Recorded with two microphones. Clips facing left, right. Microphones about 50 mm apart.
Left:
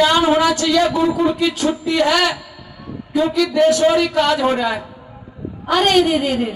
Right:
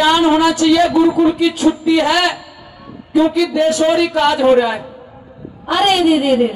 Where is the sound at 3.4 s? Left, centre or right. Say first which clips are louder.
Even; centre.